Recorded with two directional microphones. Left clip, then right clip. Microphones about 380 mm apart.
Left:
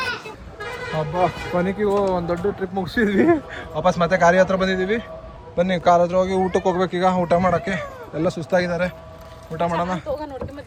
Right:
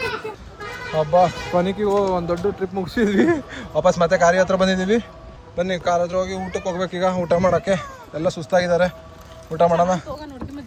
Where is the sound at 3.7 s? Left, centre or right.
Centre.